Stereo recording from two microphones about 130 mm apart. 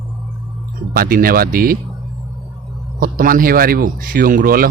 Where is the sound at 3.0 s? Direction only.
90° right.